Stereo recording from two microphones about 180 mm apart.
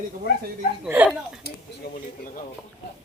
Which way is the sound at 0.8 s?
10° right (ahead or behind).